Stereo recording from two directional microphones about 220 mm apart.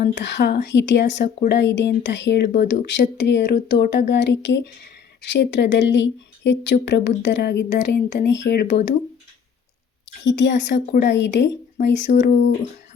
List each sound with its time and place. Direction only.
0.0 s speech: 50° left (ahead or behind)
10.2 s speech: 55° left (ahead or behind)